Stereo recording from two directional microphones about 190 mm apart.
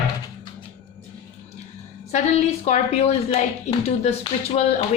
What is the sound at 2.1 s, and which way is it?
A woman's voice, 35° left (ahead or behind).